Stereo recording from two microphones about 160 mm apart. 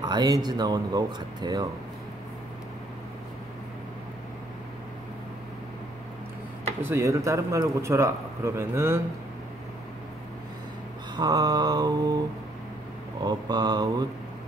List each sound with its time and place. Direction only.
0.0 s speech: 25° right (ahead or behind)
6.8 s a man's voice: 15° right (ahead or behind)
11.1 s speech: 25° right (ahead or behind)
13.2 s speech: 25° right (ahead or behind)